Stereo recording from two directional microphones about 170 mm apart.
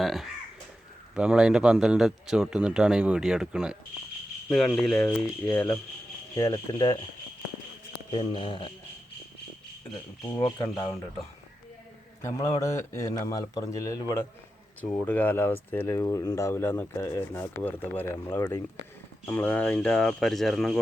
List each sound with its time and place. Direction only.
0.0 s a man's voice: centre (ahead or behind)
6.3 s speech: 20° left (ahead or behind)
8.1 s a sound: 30° left (ahead or behind)
10.2 s speech: 20° left (ahead or behind)
12.6 s a man's voice: 20° left (ahead or behind); by 20.7 s centre (ahead or behind)